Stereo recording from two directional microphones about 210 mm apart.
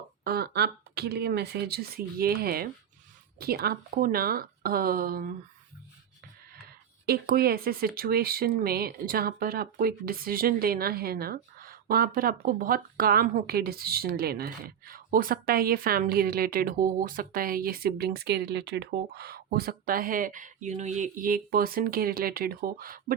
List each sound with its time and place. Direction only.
0.3 s speech: 45° right (ahead or behind)
7.0 s speech: 45° right (ahead or behind)